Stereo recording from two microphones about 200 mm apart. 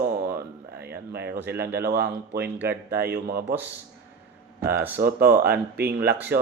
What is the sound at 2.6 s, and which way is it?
Speech, 10° right (ahead or behind).